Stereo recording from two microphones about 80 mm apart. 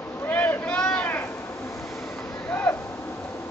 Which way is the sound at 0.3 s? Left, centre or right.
Left.